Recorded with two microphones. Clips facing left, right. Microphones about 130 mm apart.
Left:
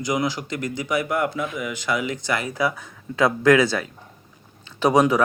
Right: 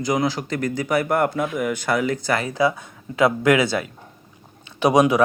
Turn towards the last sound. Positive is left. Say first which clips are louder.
# right 1 dB
turn(degrees=-15)  # may be behind; listen again after turning